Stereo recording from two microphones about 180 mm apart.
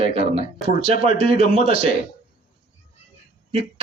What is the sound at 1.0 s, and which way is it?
Speech, 30° right (ahead or behind).